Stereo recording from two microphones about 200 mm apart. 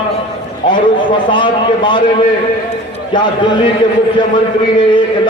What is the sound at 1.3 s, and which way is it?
Speech, 25° left (ahead or behind).